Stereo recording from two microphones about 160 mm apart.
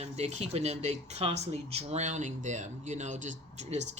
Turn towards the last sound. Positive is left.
turn(degrees=-50)  # may be behind; listen again after turning